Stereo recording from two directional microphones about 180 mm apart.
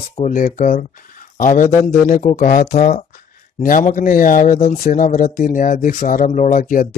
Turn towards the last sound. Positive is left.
turn(degrees=50)  # may be behind; listen again after turning